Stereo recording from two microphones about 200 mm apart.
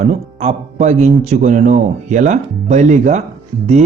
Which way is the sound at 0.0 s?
35° right (ahead or behind).